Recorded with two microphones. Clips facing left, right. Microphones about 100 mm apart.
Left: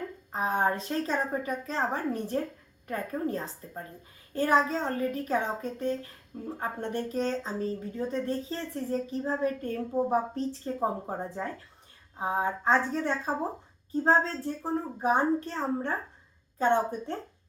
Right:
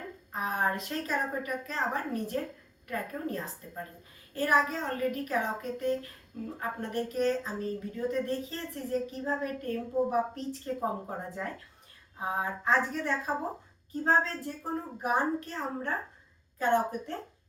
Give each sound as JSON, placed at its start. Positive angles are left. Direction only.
{"t": 0.3, "sound": "speech", "side_deg": 30}